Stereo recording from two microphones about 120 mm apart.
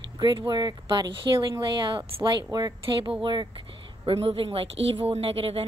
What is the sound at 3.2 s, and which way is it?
A woman's voice, 45° right (ahead or behind).